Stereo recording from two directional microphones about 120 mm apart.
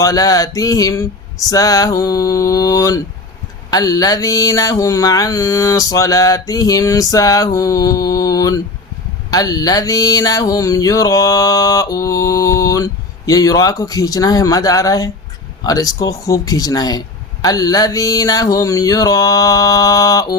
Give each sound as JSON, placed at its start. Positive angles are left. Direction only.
{"t": 0.0, "sound": "music", "side_deg": 30}
{"t": 15.6, "sound": "speech", "side_deg": 30}
{"t": 17.4, "sound": "music", "side_deg": 30}